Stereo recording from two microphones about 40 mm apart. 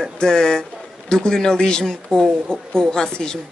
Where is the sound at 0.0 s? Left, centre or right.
Centre.